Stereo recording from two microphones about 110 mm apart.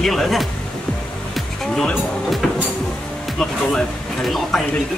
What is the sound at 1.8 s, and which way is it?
Speech, 5° left (ahead or behind).